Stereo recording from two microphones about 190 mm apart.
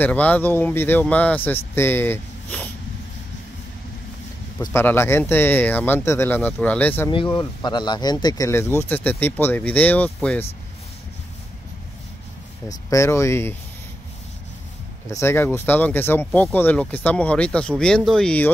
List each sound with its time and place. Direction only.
0.0 s speech: 10° left (ahead or behind)
4.6 s speech: 10° left (ahead or behind)
7.3 s speech: 25° left (ahead or behind); by 10.4 s 5° left (ahead or behind)
12.6 s speech: 15° left (ahead or behind)
15.0 s speech: 15° left (ahead or behind)
16.3 s speech: centre (ahead or behind)